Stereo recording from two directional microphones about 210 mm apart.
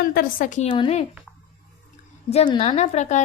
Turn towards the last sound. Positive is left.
turn(degrees=35)  # may be behind; listen again after turning